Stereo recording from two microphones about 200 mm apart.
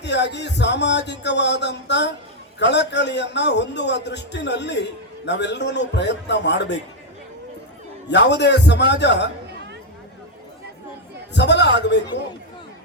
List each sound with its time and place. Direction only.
0.0 s a man's voice: 60° left (ahead or behind)
8.1 s a man's voice: 60° left (ahead or behind)
11.3 s a man's voice: 60° left (ahead or behind)